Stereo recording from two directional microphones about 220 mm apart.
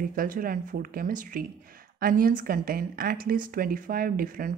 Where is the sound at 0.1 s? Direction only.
40° right (ahead or behind).